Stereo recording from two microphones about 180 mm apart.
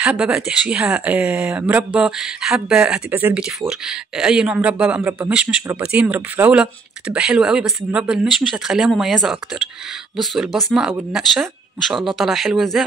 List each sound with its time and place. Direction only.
0.0 s speech: 5° right (ahead or behind)